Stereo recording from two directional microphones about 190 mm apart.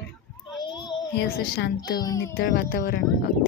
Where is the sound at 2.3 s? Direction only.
55° left (ahead or behind).